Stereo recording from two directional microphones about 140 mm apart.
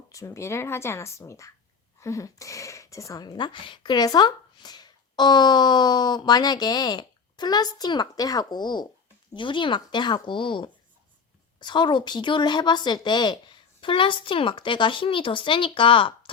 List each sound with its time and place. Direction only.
0.1 s speech: 20° left (ahead or behind); by 16.3 s 40° left (ahead or behind)